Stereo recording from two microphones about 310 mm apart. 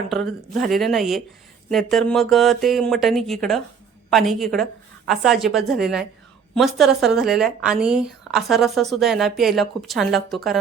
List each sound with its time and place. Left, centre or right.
0.1 s a woman's voice: centre